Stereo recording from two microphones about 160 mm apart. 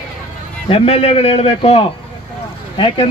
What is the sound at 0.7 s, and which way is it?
A man's voice, 40° left (ahead or behind).